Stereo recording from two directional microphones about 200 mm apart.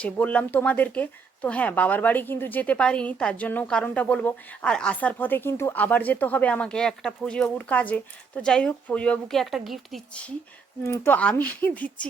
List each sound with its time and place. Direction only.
0.0 s speech: 5° left (ahead or behind)
10.8 s speech: 10° left (ahead or behind)